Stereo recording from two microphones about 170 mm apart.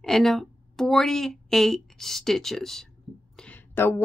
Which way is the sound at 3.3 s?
5° left (ahead or behind).